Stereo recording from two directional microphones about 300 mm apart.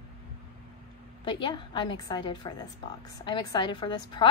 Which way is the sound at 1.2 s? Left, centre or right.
Centre.